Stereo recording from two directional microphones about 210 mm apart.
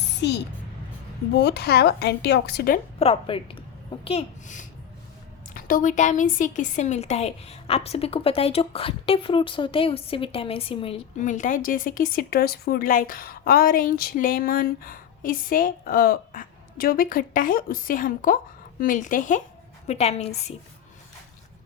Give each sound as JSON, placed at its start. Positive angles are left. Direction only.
{"t": 1.4, "sound": "a woman's voice", "side_deg": 50}
{"t": 3.0, "sound": "a woman's voice", "side_deg": 25}